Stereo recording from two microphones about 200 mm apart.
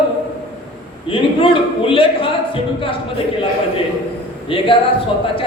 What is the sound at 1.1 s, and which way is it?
Speech, 25° left (ahead or behind).